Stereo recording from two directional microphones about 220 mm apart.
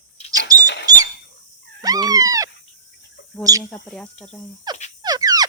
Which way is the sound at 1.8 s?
15° right (ahead or behind).